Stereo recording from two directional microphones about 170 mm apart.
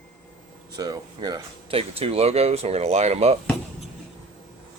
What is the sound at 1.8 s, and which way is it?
Speech, 35° right (ahead or behind).